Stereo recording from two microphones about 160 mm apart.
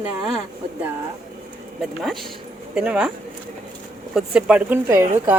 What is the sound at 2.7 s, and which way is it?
Speech, 5° right (ahead or behind).